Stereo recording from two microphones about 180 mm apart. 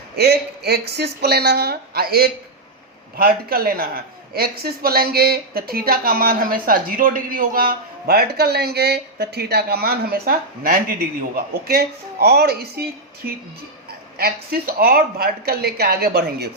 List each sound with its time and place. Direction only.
0.2 s a man's voice: 60° right (ahead or behind)